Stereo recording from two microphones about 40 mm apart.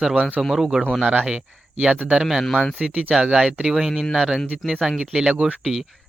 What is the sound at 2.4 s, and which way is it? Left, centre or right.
Speech, centre.